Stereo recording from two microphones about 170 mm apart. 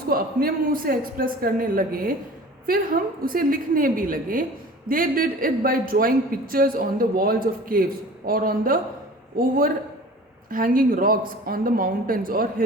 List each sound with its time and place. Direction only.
0.1 s a man's voice: 60° right (ahead or behind)